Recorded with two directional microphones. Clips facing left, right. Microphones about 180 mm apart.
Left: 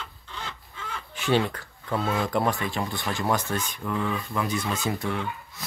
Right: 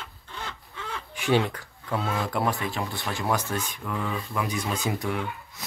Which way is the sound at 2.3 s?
5° right (ahead or behind).